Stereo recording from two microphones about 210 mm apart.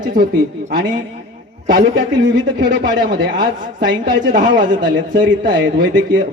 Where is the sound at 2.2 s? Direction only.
60° right (ahead or behind).